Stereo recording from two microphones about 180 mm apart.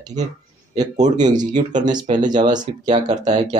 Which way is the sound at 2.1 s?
35° right (ahead or behind).